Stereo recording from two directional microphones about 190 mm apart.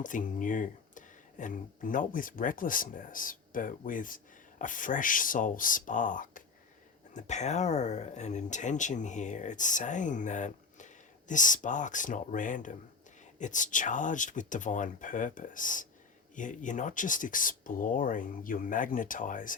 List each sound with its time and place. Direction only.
0.0 s speech: 45° left (ahead or behind)